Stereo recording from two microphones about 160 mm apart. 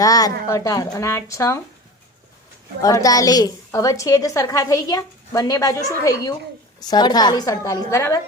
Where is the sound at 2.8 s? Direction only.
20° left (ahead or behind).